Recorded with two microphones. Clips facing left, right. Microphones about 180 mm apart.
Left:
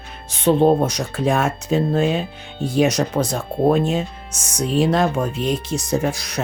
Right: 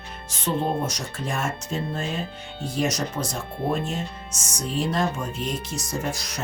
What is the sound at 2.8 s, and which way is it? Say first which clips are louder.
Speech: left 8 dB; 65° left (ahead or behind).